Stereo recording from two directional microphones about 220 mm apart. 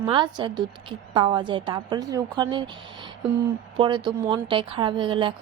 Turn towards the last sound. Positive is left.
turn(degrees=-20)  # may be behind; listen again after turning